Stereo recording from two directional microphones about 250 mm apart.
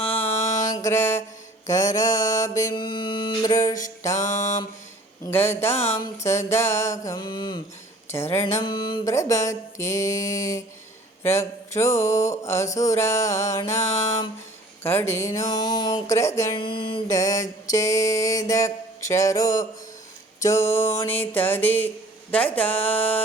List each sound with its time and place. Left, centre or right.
0.0 s mantra: centre
0.7 s music: centre
1.6 s speech: centre
4.1 s mantra: left
5.3 s speech: centre
5.7 s mantra: left
6.1 s speech: centre
8.4 s speech: left; by 23.2 s centre